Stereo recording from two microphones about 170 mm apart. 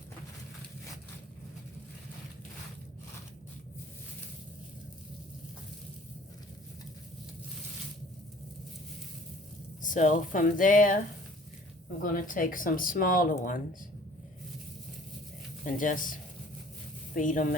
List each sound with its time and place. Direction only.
9.8 s speech: 50° left (ahead or behind)
12.0 s speech: 55° left (ahead or behind)
15.6 s speech: 50° left (ahead or behind)